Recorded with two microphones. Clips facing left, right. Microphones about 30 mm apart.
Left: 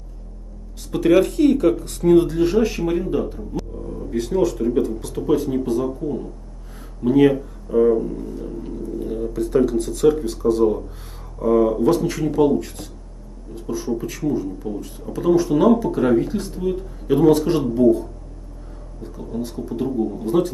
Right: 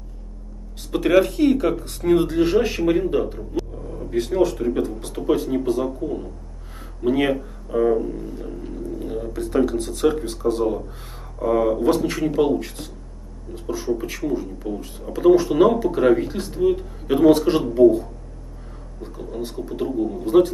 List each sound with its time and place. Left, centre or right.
0.9 s speech: centre
19.1 s speech: centre